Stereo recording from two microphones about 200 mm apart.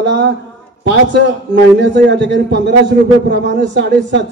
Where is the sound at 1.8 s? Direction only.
60° right (ahead or behind).